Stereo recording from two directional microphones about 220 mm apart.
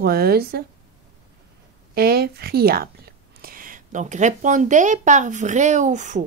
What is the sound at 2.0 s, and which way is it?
Speech, 45° right (ahead or behind).